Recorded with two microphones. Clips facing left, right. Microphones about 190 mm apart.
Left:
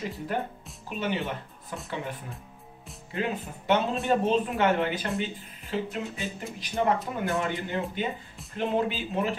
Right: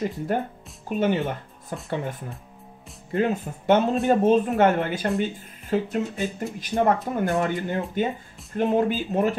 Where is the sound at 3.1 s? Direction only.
45° right (ahead or behind).